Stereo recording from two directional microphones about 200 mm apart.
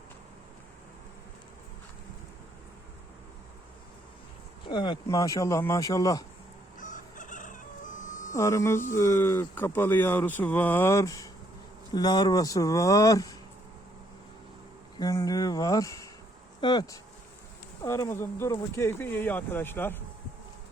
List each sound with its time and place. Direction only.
4.6 s speech: 25° left (ahead or behind)
6.7 s chicken: 40° left (ahead or behind)
8.3 s speech: 15° left (ahead or behind)
14.9 s speech: 15° left (ahead or behind)